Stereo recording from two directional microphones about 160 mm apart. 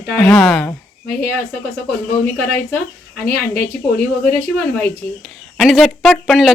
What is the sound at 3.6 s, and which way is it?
Speech, 75° left (ahead or behind).